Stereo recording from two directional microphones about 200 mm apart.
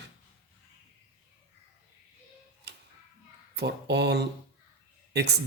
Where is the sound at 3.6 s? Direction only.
55° right (ahead or behind).